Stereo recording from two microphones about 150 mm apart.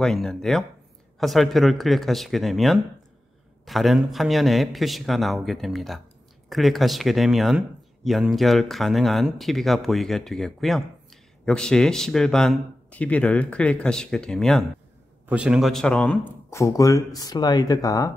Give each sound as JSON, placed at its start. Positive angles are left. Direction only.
{"t": 0.0, "sound": "speech", "side_deg": 5}
{"t": 15.2, "sound": "speech", "side_deg": -5}
{"t": 16.4, "sound": "speech", "side_deg": 20}